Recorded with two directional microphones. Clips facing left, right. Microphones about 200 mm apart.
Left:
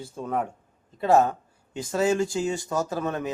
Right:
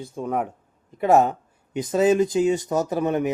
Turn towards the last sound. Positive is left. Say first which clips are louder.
# right 6 dB
turn(degrees=-20)  # may be behind; listen again after turning